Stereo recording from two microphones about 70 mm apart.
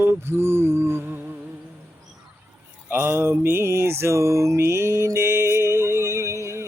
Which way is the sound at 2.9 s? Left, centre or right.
Right.